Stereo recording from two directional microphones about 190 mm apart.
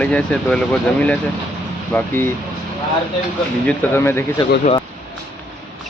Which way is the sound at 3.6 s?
10° left (ahead or behind).